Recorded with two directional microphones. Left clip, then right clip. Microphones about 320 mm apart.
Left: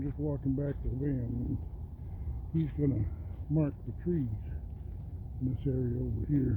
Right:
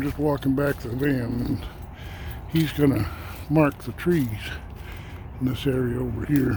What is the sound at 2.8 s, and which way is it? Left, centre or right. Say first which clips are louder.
Speech: right 12 dB; centre.